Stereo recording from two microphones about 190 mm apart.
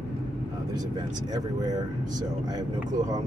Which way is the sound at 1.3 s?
20° right (ahead or behind).